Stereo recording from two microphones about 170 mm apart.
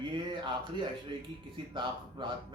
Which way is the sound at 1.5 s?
30° right (ahead or behind).